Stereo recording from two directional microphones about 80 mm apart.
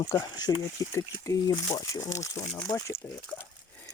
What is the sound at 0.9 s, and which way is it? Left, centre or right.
Speech, left.